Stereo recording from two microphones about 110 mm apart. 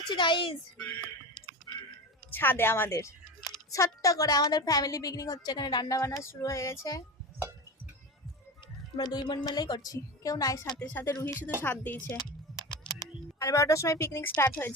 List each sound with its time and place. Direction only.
0.1 s speech: 45° left (ahead or behind)
2.3 s speech: 20° left (ahead or behind)
9.0 s speech: 35° left (ahead or behind)
10.8 s speech: 10° left (ahead or behind)
11.0 s speech: 30° left (ahead or behind)
11.6 s speech: 15° left (ahead or behind)
12.9 s speech: 30° left (ahead or behind)